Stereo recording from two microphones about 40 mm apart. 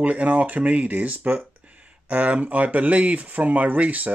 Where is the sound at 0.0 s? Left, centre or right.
Right.